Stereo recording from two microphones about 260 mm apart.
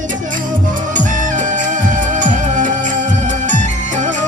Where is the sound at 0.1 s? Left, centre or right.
Right.